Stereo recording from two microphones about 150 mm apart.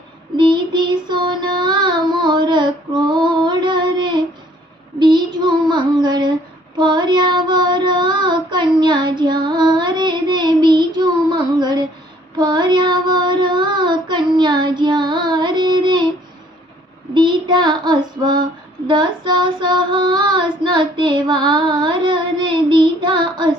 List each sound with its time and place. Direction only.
0.3 s child singing: 30° right (ahead or behind)
17.2 s child singing: 30° right (ahead or behind)